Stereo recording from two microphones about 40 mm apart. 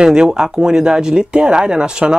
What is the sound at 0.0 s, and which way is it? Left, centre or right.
Speech, right.